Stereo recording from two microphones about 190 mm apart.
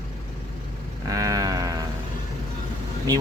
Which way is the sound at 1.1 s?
20° right (ahead or behind).